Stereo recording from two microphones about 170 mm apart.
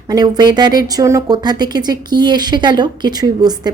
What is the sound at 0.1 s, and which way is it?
A woman's voice, 25° right (ahead or behind).